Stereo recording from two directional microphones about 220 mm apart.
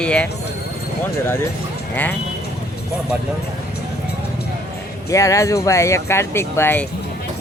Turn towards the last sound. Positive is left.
turn(degrees=10)  # may be behind; listen again after turning